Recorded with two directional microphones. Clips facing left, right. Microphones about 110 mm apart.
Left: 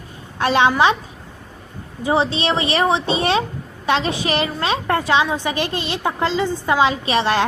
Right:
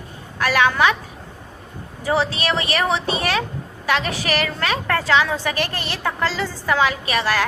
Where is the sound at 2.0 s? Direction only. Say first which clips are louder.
Left 2 dB; 20° left (ahead or behind).